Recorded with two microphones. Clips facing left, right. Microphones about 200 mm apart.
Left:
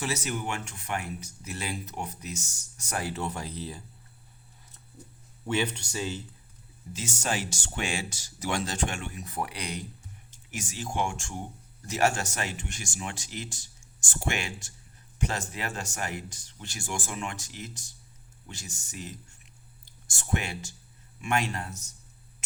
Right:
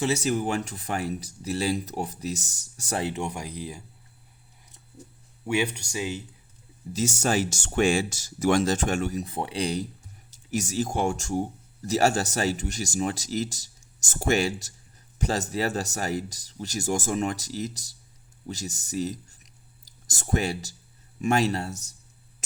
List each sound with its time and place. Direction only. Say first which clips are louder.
0.0 s speech: right 7 dB; 30° right (ahead or behind); by 3.8 s 10° right (ahead or behind)
5.5 s speech: right 3 dB; 10° right (ahead or behind)
6.9 s speech: right 7 dB; 40° right (ahead or behind)
9.2 s speech: right 6 dB; 25° right (ahead or behind)